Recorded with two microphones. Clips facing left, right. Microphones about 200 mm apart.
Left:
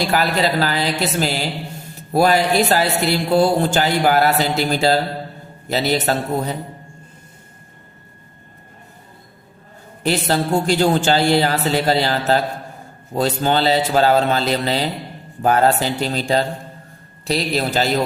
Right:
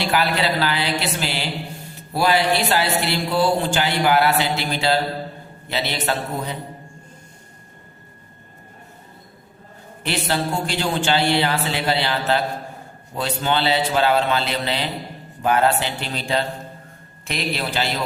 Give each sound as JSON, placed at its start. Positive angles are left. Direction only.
{"t": 0.0, "sound": "speech", "side_deg": 40}
{"t": 10.0, "sound": "speech", "side_deg": 40}